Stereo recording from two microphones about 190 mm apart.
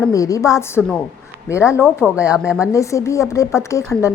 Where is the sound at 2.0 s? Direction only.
5° right (ahead or behind).